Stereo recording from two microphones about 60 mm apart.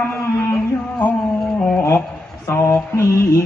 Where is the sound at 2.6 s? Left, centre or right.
Left.